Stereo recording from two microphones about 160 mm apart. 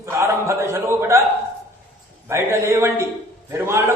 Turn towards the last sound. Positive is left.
turn(degrees=-15)  # may be behind; listen again after turning